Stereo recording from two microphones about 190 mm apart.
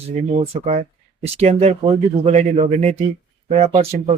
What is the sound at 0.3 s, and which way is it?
Speech, 30° right (ahead or behind).